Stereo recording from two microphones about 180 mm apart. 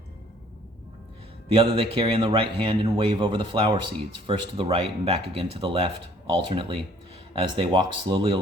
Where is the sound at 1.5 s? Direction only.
30° right (ahead or behind).